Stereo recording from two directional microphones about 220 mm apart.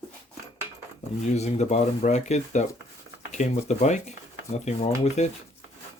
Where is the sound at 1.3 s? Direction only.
30° left (ahead or behind).